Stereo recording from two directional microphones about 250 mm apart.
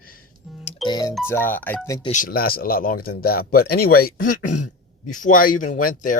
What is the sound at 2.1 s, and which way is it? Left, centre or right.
Speech, left.